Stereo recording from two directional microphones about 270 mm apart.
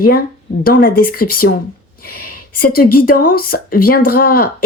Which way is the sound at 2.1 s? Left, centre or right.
Left.